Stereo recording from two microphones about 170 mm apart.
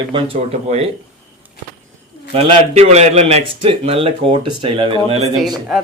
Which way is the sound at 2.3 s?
40° right (ahead or behind).